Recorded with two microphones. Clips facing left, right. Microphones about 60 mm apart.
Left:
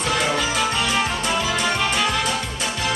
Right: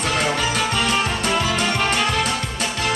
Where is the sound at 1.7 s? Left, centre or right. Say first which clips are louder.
Right 1 dB; right.